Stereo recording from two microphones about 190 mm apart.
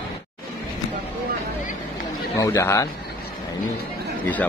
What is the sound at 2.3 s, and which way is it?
Speech, 15° left (ahead or behind).